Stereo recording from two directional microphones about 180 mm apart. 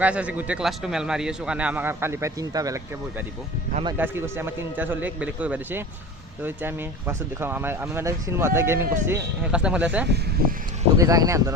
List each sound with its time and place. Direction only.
0.0 s speech: 5° right (ahead or behind)
10.9 s speech: 20° right (ahead or behind)